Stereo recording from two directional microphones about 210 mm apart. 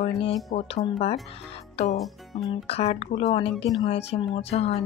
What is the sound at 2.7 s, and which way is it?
Speech, 30° left (ahead or behind).